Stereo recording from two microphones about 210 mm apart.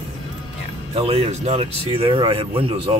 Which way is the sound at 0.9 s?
30° right (ahead or behind).